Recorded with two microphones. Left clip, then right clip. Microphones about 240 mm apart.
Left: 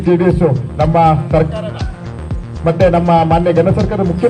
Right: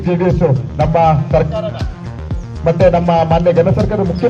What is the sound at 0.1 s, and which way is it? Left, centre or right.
A man's voice, left.